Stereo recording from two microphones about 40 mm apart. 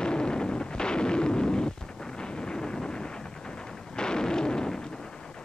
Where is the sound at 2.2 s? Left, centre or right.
Centre.